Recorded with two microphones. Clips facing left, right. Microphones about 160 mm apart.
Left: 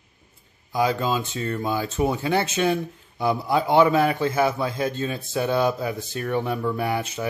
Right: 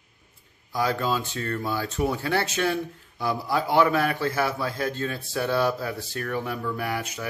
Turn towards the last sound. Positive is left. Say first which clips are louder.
# left 4 dB
turn(degrees=25)  # may be behind; listen again after turning